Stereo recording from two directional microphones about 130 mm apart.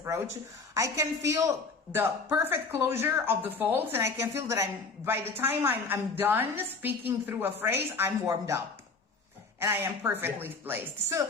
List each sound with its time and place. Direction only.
0.7 s a woman's voice: 25° right (ahead or behind)